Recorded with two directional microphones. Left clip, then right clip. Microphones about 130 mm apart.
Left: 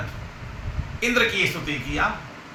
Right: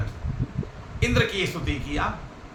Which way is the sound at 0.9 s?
40° right (ahead or behind).